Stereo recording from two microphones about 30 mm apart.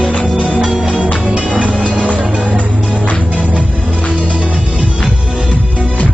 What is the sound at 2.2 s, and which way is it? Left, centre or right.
Music, right.